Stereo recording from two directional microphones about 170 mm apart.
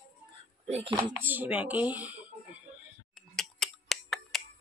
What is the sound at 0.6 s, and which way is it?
Speech, 40° right (ahead or behind).